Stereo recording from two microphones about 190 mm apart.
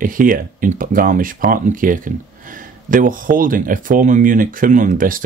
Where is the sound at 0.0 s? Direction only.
45° right (ahead or behind).